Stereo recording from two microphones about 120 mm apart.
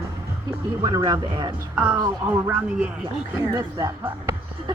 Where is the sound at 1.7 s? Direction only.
10° right (ahead or behind).